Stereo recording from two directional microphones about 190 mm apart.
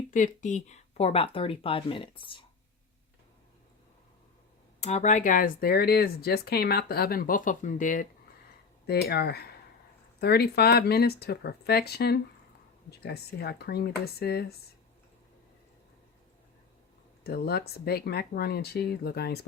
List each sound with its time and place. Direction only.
0.1 s speech: 40° left (ahead or behind)
4.8 s speech: 35° left (ahead or behind)
8.9 s speech: 55° left (ahead or behind)
17.2 s speech: 55° left (ahead or behind)